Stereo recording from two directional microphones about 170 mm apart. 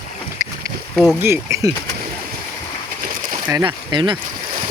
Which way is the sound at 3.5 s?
25° right (ahead or behind).